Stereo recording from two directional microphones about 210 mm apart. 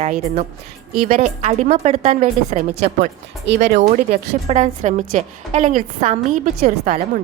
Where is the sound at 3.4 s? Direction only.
55° right (ahead or behind).